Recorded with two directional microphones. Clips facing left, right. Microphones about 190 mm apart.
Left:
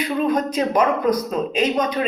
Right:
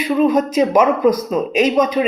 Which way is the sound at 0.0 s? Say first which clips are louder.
Right 5 dB; 10° right (ahead or behind).